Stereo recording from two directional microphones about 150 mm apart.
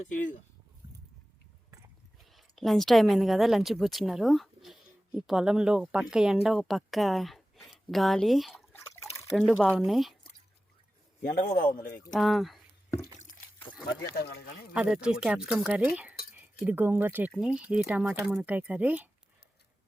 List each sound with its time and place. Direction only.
0.0 s speech: 60° left (ahead or behind)
2.2 s a woman's voice: centre (ahead or behind)
11.3 s a man's voice: 80° left
12.1 s speech: centre (ahead or behind)
14.2 s speech: 90° left
14.7 s speech: 5° right (ahead or behind)